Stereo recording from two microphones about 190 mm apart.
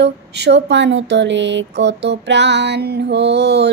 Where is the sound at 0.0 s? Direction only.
65° right (ahead or behind).